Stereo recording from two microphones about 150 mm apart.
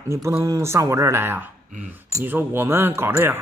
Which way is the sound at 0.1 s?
20° right (ahead or behind).